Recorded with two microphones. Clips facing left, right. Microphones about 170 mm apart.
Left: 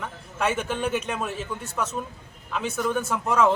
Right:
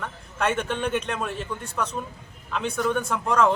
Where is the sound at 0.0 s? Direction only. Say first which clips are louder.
Even; 5° left (ahead or behind).